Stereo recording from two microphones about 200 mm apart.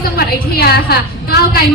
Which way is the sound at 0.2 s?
50° left (ahead or behind).